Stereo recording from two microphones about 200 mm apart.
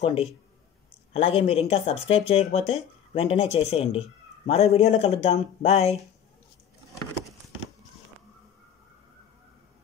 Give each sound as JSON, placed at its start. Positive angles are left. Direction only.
{"t": 0.0, "sound": "speech", "side_deg": 30}